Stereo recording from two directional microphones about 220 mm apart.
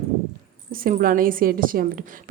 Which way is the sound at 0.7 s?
40° right (ahead or behind).